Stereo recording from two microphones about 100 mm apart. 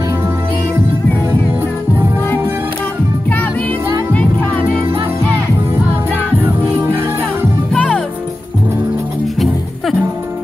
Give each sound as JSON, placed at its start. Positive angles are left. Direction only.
{"t": 1.5, "sound": "music", "side_deg": -25}
{"t": 6.6, "sound": "music", "side_deg": -15}
{"t": 7.7, "sound": "music", "side_deg": 10}